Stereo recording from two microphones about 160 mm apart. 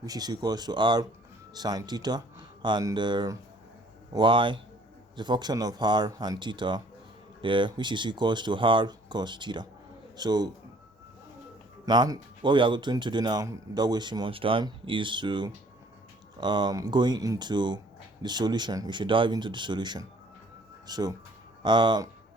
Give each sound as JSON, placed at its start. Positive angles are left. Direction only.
{"t": 0.0, "sound": "speech", "side_deg": -25}
{"t": 11.9, "sound": "speech", "side_deg": -25}